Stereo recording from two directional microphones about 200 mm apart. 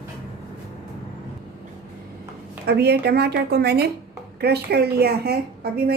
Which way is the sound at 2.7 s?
55° right (ahead or behind).